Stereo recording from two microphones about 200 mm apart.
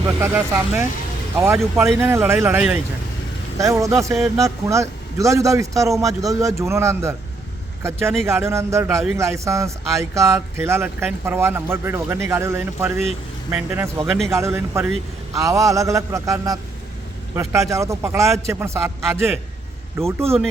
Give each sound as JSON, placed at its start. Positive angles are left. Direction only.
{"t": 0.0, "sound": "a man's voice", "side_deg": -10}